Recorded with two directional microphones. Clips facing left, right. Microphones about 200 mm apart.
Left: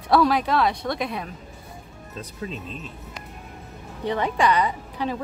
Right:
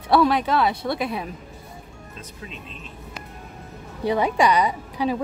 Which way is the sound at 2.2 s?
40° left (ahead or behind).